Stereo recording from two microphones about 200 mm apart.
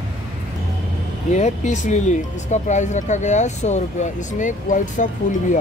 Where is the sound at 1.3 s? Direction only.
35° left (ahead or behind).